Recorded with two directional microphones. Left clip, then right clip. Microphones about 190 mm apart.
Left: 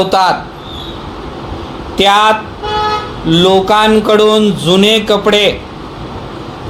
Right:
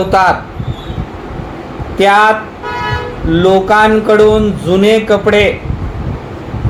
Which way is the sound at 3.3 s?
30° left (ahead or behind).